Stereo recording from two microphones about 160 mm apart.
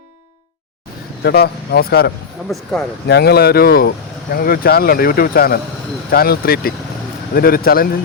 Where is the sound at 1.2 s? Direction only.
80° left.